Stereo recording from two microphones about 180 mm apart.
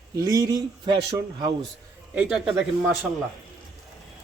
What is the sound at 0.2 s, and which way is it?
Speech, 20° right (ahead or behind).